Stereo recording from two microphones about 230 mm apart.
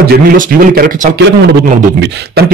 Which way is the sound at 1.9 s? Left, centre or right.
Right.